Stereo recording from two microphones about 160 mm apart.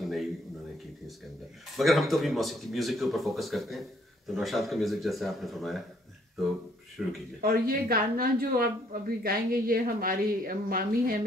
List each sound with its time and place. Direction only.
0.0 s a sound: centre (ahead or behind)
1.8 s speech: centre (ahead or behind)
7.0 s speech: centre (ahead or behind)
7.4 s a woman's voice: 70° right (ahead or behind)